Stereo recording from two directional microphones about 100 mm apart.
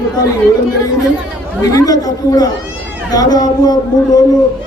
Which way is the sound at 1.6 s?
35° left (ahead or behind).